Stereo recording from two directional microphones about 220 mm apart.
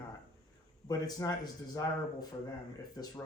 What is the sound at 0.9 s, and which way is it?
Speech, 15° left (ahead or behind).